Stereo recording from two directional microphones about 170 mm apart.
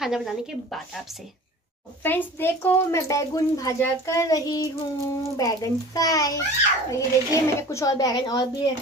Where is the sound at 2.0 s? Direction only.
10° left (ahead or behind).